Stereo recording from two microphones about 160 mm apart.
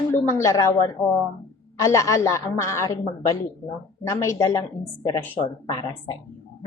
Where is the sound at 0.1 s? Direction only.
15° left (ahead or behind).